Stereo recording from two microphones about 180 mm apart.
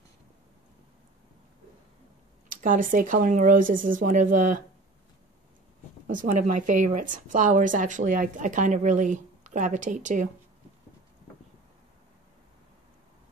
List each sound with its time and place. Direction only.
2.5 s a woman's voice: 50° right (ahead or behind)
6.0 s a woman's voice: 40° right (ahead or behind)